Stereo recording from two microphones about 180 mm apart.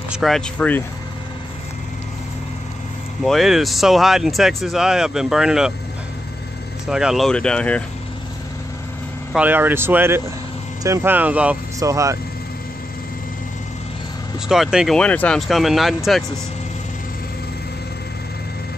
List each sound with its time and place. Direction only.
0.1 s speech: centre (ahead or behind)
3.3 s speech: centre (ahead or behind)
6.9 s speech: 5° right (ahead or behind)
9.3 s speech: 10° right (ahead or behind)
14.5 s speech: 5° right (ahead or behind)